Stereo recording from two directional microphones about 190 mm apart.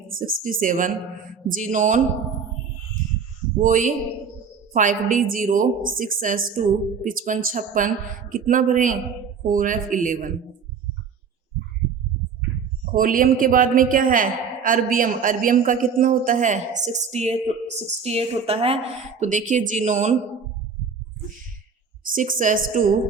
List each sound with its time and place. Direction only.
0.2 s a woman's voice: 45° right (ahead or behind)
3.6 s a woman's voice: 45° right (ahead or behind)
12.8 s a woman's voice: 45° right (ahead or behind); by 18.8 s 30° right (ahead or behind)
19.2 s speech: 40° right (ahead or behind)
22.0 s a woman's voice: 45° right (ahead or behind)